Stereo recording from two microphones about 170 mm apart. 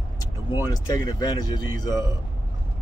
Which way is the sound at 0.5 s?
20° left (ahead or behind).